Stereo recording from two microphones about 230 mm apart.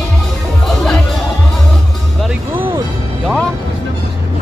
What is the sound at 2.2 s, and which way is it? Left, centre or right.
Music, centre.